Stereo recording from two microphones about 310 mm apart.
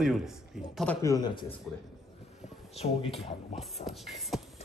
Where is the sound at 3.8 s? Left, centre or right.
Centre.